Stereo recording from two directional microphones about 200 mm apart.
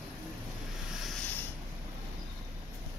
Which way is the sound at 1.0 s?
5° left (ahead or behind).